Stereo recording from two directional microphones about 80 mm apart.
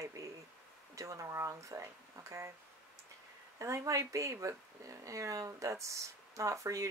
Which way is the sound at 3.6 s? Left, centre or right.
Right.